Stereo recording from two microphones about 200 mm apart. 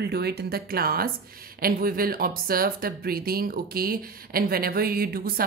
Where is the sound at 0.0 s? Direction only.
55° right (ahead or behind).